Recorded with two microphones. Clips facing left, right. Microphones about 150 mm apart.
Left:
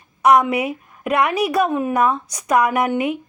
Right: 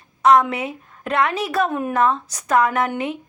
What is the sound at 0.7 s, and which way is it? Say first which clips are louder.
Speech: left 4 dB; 10° left (ahead or behind).